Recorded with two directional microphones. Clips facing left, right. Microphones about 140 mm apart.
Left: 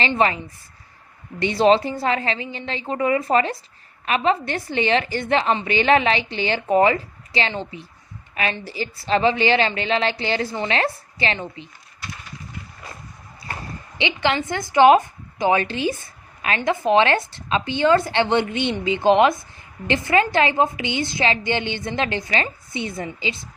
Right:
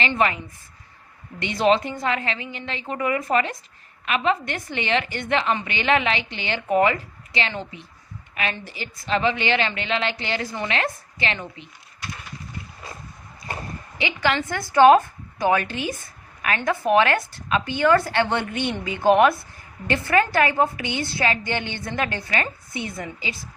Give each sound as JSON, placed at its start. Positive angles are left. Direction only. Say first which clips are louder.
{"t": 0.0, "sound": "a woman's voice", "louder": "left 2 dB", "side_deg": 30}
{"t": 14.0, "sound": "a woman's voice", "louder": "left 2 dB", "side_deg": 25}